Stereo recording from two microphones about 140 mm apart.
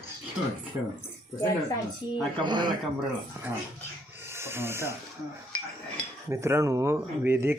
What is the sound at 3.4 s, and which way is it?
Speech, 15° right (ahead or behind).